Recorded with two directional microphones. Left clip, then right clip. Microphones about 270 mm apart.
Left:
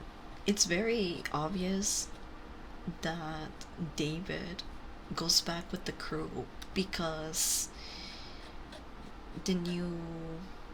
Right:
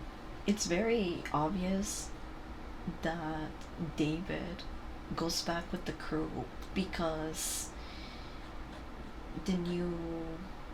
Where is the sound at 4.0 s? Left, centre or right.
Centre.